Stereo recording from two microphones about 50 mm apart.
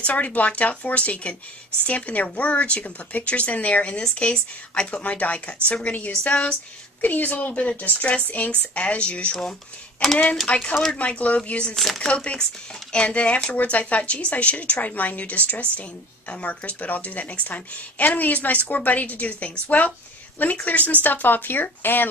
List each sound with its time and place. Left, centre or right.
0.0 s speech: left
10.0 s speech: centre
10.5 s speech: left
11.7 s speech: centre
12.1 s speech: left
20.6 s speech: left